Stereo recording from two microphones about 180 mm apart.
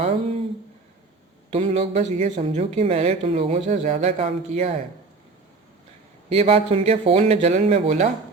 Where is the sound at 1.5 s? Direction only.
35° right (ahead or behind).